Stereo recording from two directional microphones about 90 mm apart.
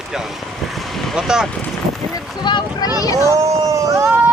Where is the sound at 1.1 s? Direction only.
5° right (ahead or behind).